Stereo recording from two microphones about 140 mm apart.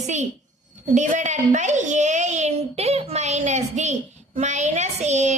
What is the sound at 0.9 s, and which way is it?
A woman's voice, 60° right (ahead or behind).